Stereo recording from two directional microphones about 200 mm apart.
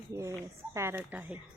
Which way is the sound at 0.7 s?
10° right (ahead or behind).